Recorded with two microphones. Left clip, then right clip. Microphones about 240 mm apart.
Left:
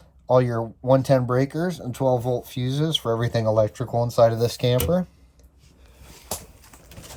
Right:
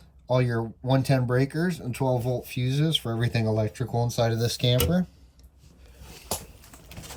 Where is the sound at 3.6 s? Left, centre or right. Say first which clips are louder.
Left 7 dB; right.